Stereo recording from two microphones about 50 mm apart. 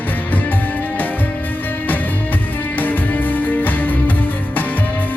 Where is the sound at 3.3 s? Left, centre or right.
Left.